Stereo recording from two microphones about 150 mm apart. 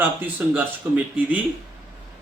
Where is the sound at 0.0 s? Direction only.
10° right (ahead or behind).